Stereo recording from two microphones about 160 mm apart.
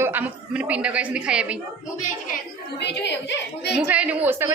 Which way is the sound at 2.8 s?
90° left.